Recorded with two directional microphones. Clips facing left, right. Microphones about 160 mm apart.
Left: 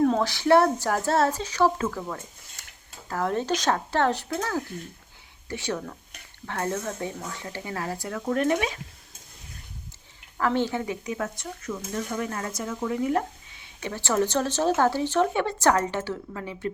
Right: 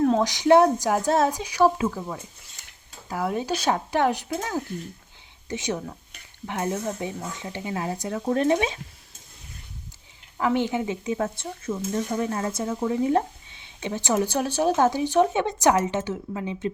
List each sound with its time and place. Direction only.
0.2 s a woman's voice: 15° right (ahead or behind)
10.3 s speech: 15° right (ahead or behind)